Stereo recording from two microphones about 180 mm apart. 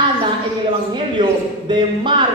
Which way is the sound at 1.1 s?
25° right (ahead or behind).